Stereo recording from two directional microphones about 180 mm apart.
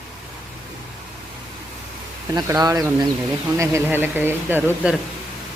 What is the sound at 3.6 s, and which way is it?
Speech, 15° right (ahead or behind).